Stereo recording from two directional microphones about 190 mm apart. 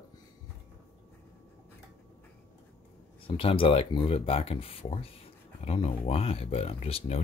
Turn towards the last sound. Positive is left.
turn(degrees=30)  # may be behind; listen again after turning